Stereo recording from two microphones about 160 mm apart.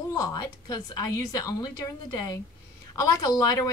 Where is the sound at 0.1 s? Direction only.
20° left (ahead or behind).